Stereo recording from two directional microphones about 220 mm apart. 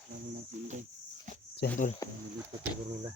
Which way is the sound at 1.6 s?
45° left (ahead or behind).